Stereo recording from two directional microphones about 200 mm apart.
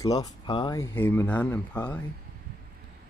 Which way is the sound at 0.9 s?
10° left (ahead or behind).